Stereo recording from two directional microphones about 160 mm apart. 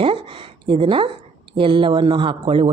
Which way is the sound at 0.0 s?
35° right (ahead or behind).